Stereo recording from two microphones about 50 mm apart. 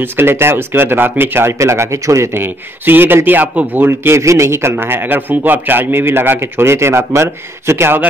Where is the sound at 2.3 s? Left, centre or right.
Right.